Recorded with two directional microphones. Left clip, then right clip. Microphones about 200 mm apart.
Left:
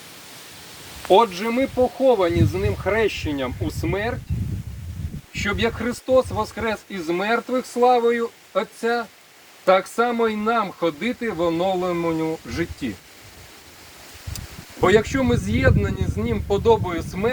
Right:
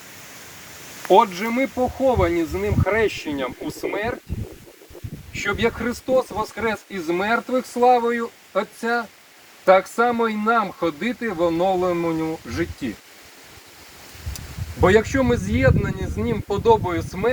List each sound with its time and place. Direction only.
1.0 s speech: 10° left (ahead or behind)
5.3 s speech: 15° left (ahead or behind)
14.3 s speech: 35° left (ahead or behind)